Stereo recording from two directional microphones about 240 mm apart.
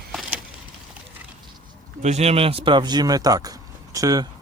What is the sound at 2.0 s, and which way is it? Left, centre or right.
Speech, right.